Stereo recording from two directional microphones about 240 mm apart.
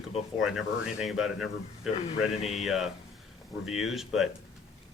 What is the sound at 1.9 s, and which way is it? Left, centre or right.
Speech, left.